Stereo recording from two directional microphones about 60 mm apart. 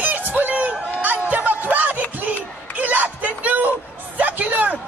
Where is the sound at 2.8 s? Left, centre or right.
Right.